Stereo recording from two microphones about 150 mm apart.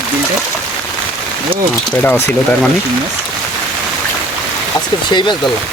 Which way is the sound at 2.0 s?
15° left (ahead or behind).